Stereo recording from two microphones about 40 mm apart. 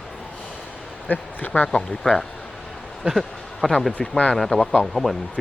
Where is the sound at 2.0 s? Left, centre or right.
Centre.